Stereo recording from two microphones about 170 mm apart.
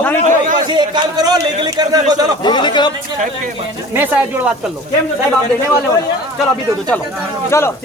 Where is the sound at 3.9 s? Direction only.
10° right (ahead or behind).